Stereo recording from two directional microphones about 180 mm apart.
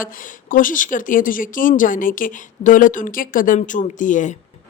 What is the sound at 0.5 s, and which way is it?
Speech, 50° left (ahead or behind).